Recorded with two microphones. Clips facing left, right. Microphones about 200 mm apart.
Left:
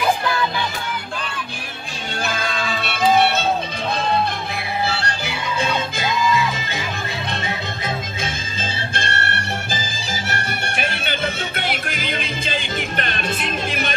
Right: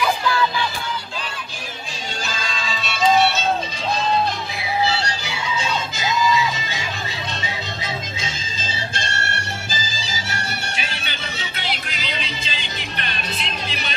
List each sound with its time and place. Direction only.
2.2 s music: 60° left (ahead or behind)
4.6 s music: 55° left (ahead or behind)